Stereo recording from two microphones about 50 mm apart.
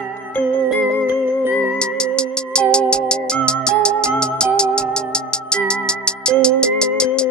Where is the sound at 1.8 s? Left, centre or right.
Centre.